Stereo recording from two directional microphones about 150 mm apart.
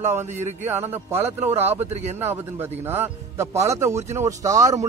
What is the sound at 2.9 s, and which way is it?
Speech, 15° right (ahead or behind).